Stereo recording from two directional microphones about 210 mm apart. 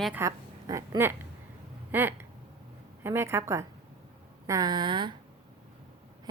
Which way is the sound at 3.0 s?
10° right (ahead or behind).